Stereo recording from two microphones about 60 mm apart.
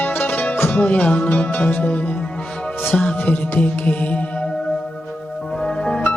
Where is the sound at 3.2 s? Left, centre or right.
Left.